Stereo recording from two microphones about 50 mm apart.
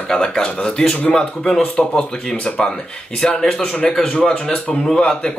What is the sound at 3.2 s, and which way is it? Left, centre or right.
A man's voice, left.